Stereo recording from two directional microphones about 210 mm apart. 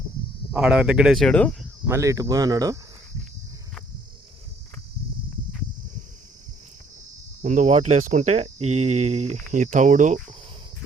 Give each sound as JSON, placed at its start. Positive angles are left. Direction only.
{"t": 0.5, "sound": "speech", "side_deg": -5}
{"t": 1.9, "sound": "speech", "side_deg": -15}
{"t": 7.4, "sound": "speech", "side_deg": -35}